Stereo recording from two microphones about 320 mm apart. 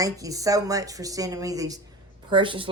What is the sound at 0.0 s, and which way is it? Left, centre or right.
Speech, centre.